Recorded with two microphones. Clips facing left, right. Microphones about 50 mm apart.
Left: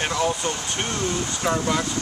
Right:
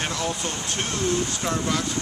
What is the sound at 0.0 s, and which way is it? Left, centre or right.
Speech, centre.